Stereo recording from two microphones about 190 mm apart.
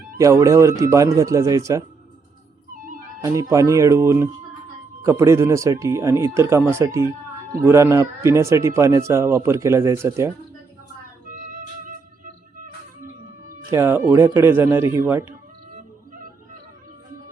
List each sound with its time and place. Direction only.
0.2 s speech: 15° right (ahead or behind)
3.2 s speech: 15° right (ahead or behind)
11.3 s music: 45° right (ahead or behind)
13.7 s speech: 15° right (ahead or behind)